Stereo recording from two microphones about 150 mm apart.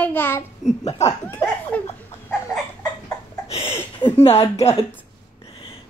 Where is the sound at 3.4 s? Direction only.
40° left (ahead or behind).